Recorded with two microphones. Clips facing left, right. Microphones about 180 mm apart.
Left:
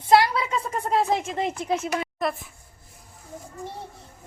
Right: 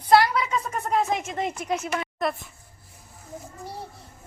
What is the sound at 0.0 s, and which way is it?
A woman's voice, 25° left (ahead or behind).